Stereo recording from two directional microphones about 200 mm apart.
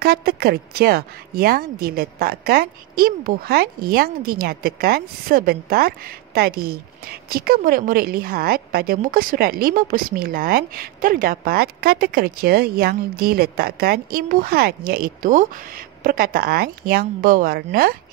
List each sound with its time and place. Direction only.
0.0 s speech: 50° right (ahead or behind)